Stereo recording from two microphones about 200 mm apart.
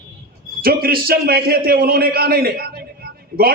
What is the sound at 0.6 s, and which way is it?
A man's voice, 50° right (ahead or behind).